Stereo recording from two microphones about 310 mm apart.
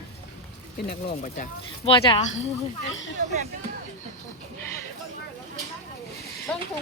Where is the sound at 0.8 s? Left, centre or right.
Left.